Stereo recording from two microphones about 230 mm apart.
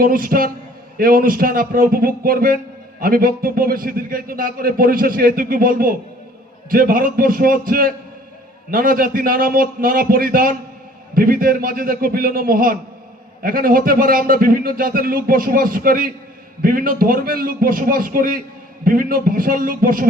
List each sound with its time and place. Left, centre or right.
0.0 s a man's voice: right